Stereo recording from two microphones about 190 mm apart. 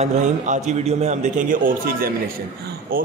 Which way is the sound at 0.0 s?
40° right (ahead or behind).